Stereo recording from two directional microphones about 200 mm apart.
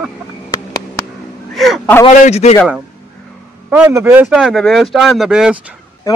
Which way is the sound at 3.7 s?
10° right (ahead or behind).